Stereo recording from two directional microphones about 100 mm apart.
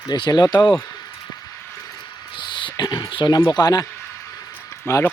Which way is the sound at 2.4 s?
50° left (ahead or behind).